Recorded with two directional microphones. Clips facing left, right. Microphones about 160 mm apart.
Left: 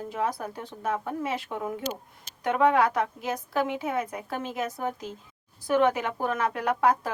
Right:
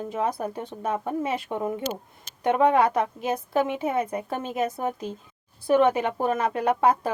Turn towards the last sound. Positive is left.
turn(degrees=-25)  # may be behind; listen again after turning